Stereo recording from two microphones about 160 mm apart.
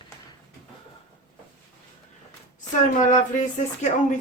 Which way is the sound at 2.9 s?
50° left (ahead or behind).